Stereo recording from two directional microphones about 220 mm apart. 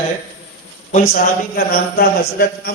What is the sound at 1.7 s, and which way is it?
A man's voice, 40° left (ahead or behind).